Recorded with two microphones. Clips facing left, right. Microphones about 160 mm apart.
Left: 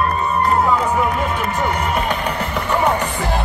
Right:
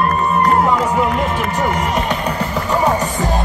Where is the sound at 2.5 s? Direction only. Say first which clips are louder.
Right 1 dB; 10° right (ahead or behind).